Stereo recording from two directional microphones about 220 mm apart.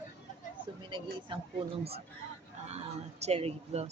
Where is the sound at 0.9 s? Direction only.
20° right (ahead or behind).